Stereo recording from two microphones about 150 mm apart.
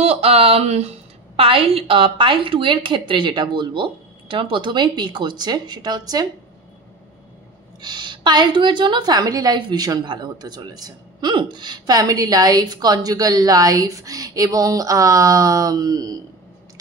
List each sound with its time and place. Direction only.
0.0 s a woman's voice: 40° right (ahead or behind)
7.8 s a woman's voice: 30° right (ahead or behind)